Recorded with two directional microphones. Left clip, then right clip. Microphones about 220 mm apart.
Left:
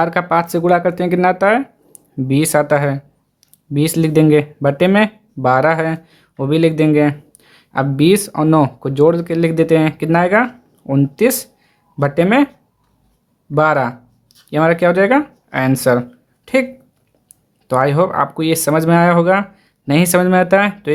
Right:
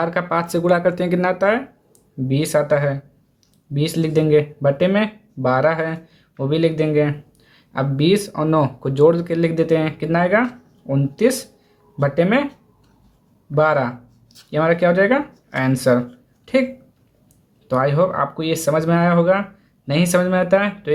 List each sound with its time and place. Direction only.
0.0 s speech: 35° left (ahead or behind)
13.5 s speech: 35° left (ahead or behind)
17.7 s speech: 40° left (ahead or behind)